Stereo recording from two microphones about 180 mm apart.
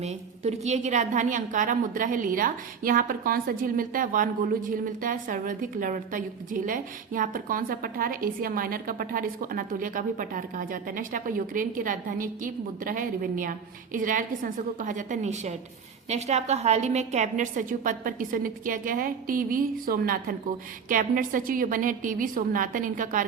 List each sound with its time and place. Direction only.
0.0 s a woman's voice: 35° right (ahead or behind)